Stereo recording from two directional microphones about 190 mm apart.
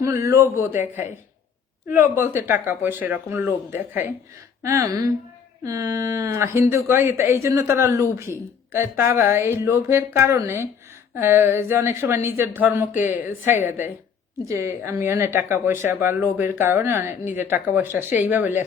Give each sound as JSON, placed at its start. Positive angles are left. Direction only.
{"t": 0.0, "sound": "speech", "side_deg": -15}
{"t": 1.9, "sound": "speech", "side_deg": -10}
{"t": 13.5, "sound": "a woman's voice", "side_deg": 40}
{"t": 14.4, "sound": "speech", "side_deg": -15}